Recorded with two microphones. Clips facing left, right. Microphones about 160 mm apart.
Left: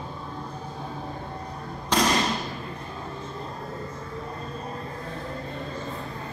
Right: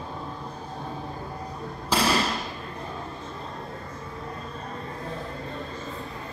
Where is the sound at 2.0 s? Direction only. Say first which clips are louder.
Left 1 dB; 30° right (ahead or behind).